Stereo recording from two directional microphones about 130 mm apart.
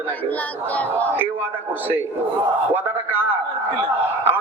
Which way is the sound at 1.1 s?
15° right (ahead or behind).